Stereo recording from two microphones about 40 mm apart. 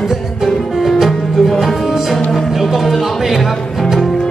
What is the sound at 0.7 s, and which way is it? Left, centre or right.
Music, centre.